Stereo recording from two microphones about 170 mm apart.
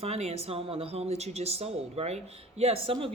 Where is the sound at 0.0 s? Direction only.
40° right (ahead or behind).